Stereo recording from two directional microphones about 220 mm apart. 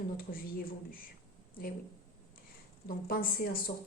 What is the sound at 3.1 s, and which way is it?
Speech, 40° left (ahead or behind).